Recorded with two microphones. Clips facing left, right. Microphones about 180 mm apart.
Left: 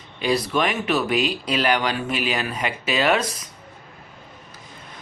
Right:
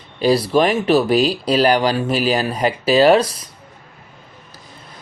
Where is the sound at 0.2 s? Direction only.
35° right (ahead or behind).